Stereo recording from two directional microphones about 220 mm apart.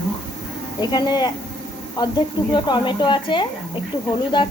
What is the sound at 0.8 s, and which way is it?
Speech, 20° left (ahead or behind).